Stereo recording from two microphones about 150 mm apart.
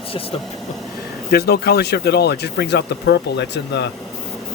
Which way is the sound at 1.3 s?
90° left.